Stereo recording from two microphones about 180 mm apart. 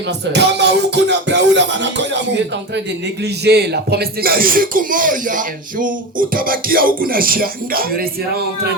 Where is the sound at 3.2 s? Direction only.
65° right (ahead or behind).